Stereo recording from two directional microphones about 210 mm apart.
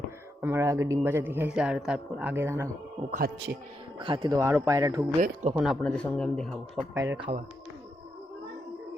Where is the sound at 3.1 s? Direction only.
40° right (ahead or behind).